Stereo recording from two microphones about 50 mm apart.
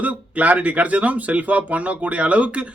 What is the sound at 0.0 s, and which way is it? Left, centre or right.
Speech, right.